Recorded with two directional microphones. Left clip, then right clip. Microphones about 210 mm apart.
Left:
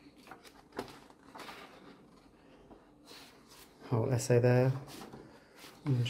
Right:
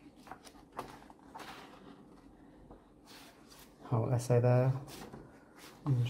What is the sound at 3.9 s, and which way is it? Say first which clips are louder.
Speech: left 2 dB; 20° left (ahead or behind).